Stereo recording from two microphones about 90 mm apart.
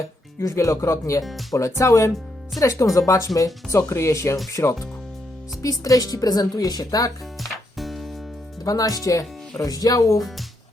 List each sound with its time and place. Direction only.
0.3 s speech: 35° left (ahead or behind)
1.2 s speech: centre (ahead or behind)
1.8 s speech: 35° left (ahead or behind)
7.4 s music: centre (ahead or behind)
8.6 s speech: 45° left (ahead or behind)
10.2 s speech: centre (ahead or behind)